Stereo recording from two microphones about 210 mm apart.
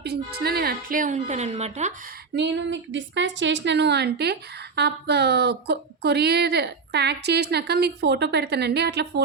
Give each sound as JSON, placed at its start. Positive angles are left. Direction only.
{"t": 0.0, "sound": "a woman's voice", "side_deg": -50}
{"t": 2.3, "sound": "a woman's voice", "side_deg": -55}